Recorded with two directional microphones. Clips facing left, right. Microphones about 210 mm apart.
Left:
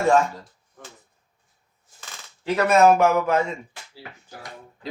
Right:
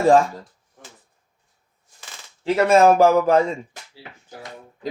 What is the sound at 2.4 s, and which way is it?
A man's voice, 30° right (ahead or behind).